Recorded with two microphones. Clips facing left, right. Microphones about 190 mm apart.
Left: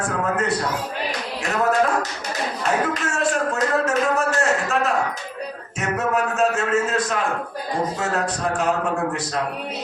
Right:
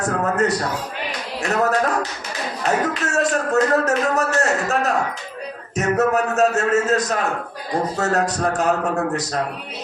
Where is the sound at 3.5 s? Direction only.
40° right (ahead or behind).